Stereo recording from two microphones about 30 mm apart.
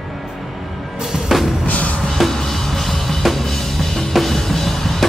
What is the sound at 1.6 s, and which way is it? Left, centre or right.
Music, left.